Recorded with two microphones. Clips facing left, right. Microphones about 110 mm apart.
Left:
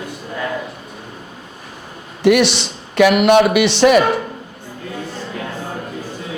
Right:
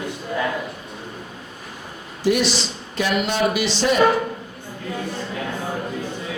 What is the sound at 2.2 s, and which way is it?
A man's voice, 70° left (ahead or behind).